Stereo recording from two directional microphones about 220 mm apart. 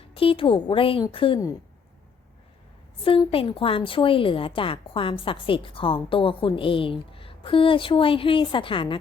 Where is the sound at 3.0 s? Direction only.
25° left (ahead or behind).